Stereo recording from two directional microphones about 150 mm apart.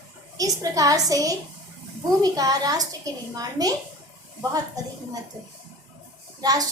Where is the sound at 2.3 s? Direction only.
25° right (ahead or behind).